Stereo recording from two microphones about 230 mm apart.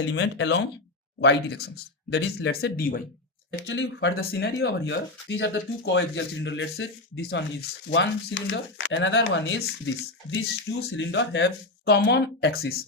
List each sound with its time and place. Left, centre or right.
0.0 s speech: left
3.7 s speech: left